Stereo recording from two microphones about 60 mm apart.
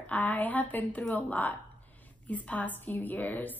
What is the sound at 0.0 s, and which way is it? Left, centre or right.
A woman's voice, left.